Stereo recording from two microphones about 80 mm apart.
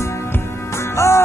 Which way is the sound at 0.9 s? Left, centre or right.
Left.